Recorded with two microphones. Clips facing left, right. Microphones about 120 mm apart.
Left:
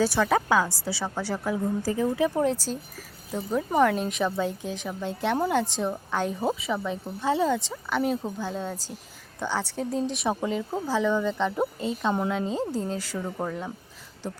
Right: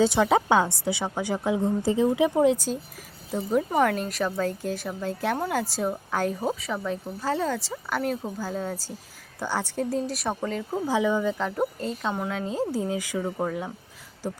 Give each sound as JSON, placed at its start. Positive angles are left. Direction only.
{"t": 0.0, "sound": "speech", "side_deg": -20}